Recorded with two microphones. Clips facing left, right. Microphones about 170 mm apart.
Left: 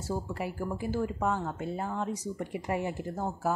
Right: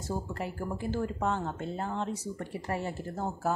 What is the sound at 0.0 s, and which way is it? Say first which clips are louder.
Speech: left 1 dB; 10° left (ahead or behind).